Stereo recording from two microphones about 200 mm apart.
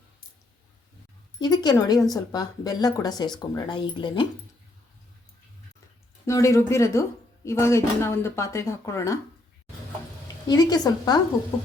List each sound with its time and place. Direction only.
1.4 s a woman's voice: 20° left (ahead or behind)
6.2 s speech: 15° left (ahead or behind)
10.5 s a woman's voice: 20° left (ahead or behind)